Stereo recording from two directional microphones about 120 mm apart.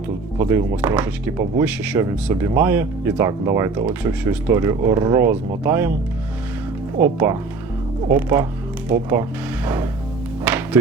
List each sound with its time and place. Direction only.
0.3 s speech: 20° right (ahead or behind)
7.0 s speech: 20° right (ahead or behind)
10.4 s music: 10° right (ahead or behind)